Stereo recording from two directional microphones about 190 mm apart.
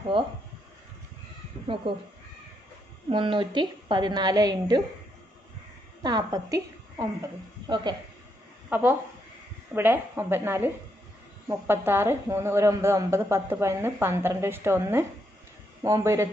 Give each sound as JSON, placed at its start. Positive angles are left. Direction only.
{"t": 0.1, "sound": "a woman's voice", "side_deg": -25}
{"t": 3.1, "sound": "a woman's voice", "side_deg": -25}
{"t": 6.0, "sound": "a woman's voice", "side_deg": -20}
{"t": 8.6, "sound": "a woman's voice", "side_deg": -10}